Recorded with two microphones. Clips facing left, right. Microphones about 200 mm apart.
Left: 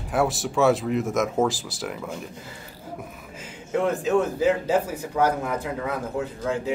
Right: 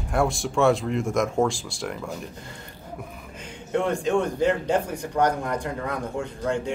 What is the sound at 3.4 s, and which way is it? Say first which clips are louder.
A man's voice: left 1 dB; 5° left (ahead or behind).